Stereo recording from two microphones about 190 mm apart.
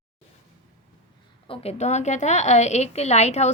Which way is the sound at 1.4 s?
30° left (ahead or behind).